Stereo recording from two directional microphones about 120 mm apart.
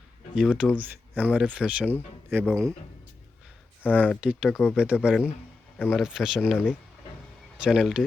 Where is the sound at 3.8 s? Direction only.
15° left (ahead or behind).